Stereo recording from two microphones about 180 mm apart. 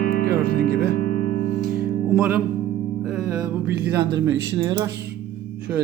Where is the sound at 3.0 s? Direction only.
Centre (ahead or behind).